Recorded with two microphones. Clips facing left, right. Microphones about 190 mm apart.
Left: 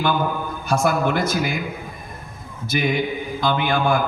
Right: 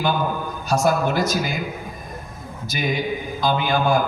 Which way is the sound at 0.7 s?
55° left (ahead or behind).